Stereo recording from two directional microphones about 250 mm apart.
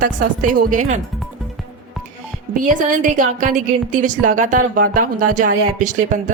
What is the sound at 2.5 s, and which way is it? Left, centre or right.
A woman's voice, right.